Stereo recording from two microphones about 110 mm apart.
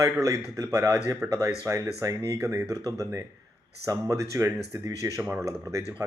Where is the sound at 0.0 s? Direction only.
30° right (ahead or behind).